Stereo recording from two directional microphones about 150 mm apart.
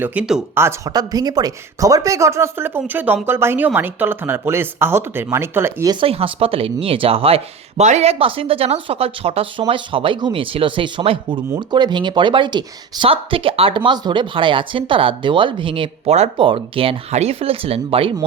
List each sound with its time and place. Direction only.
0.0 s speech: 10° right (ahead or behind)
0.5 s speech: 15° right (ahead or behind)
5.9 s speech: 35° right (ahead or behind)